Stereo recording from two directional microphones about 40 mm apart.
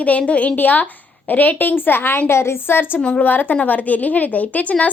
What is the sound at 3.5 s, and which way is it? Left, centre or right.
Speech, left.